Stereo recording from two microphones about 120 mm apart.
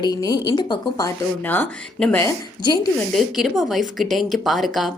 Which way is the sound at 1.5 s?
10° left (ahead or behind).